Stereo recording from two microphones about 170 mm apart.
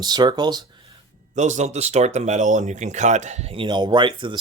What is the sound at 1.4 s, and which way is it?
Speech, 45° right (ahead or behind).